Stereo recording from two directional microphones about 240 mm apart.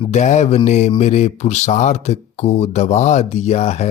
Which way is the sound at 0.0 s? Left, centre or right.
Left.